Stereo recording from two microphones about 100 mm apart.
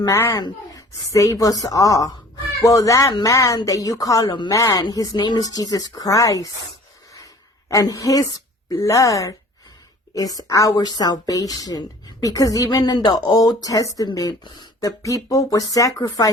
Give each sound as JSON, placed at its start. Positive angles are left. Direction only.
{"t": 0.1, "sound": "a woman's voice", "side_deg": 30}
{"t": 7.7, "sound": "a woman's voice", "side_deg": 35}
{"t": 14.8, "sound": "a woman's voice", "side_deg": 35}